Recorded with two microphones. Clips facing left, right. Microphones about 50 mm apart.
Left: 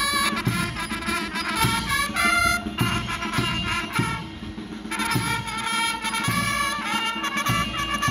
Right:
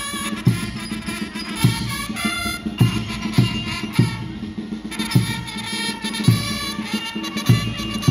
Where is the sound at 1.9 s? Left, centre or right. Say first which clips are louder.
Left 3 dB; left.